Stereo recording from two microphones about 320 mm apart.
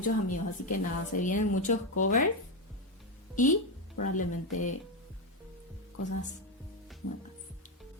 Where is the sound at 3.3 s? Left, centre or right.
Left.